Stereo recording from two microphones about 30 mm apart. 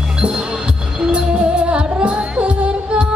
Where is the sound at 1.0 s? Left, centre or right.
Right.